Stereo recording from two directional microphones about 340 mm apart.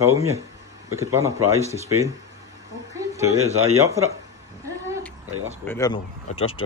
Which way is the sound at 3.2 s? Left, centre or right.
Centre.